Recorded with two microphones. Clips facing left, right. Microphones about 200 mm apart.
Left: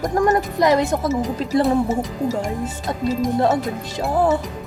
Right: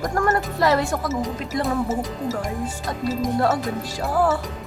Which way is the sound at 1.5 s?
35° left (ahead or behind).